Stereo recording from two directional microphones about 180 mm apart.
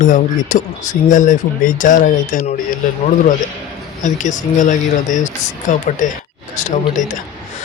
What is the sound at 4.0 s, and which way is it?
A man's voice, 45° left (ahead or behind).